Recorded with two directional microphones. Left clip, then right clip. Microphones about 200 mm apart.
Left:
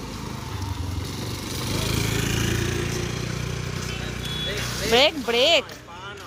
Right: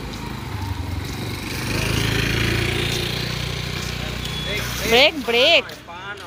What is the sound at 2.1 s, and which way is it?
Vehicle, 20° left (ahead or behind).